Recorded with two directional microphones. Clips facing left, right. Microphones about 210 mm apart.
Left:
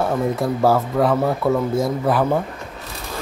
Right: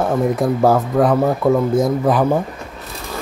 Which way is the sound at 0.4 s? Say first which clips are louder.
Right 2 dB; 15° right (ahead or behind).